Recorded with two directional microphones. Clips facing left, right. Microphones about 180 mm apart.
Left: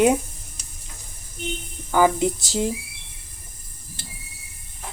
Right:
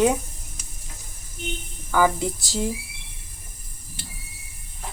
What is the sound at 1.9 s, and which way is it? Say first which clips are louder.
Speech: left 3 dB; 20° left (ahead or behind).